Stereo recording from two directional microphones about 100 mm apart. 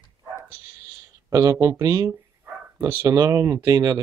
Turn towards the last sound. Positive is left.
turn(degrees=-35)  # may be behind; listen again after turning